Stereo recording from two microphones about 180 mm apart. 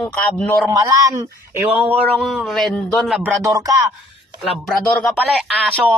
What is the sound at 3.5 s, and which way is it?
Speech, 20° right (ahead or behind).